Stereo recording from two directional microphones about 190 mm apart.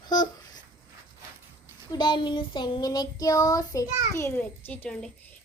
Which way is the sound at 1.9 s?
25° left (ahead or behind).